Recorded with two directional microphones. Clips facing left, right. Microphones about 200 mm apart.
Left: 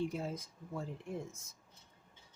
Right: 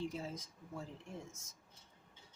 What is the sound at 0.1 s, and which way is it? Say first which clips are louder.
Speech: left 4 dB; 55° left (ahead or behind).